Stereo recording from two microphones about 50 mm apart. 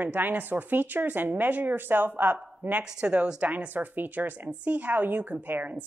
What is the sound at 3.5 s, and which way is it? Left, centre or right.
A woman's voice, right.